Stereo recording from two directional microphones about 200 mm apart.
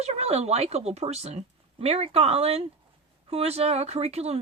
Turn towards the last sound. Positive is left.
turn(degrees=-30)  # may be behind; listen again after turning